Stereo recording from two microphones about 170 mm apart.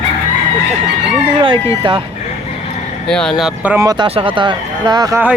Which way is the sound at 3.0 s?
5° left (ahead or behind).